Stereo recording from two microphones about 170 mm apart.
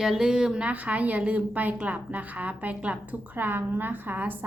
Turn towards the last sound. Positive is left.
turn(degrees=-10)  # may be behind; listen again after turning